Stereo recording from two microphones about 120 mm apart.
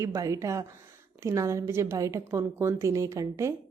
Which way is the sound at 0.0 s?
25° right (ahead or behind).